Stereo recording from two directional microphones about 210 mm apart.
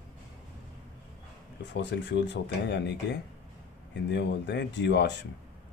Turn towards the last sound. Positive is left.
turn(degrees=55)  # may be behind; listen again after turning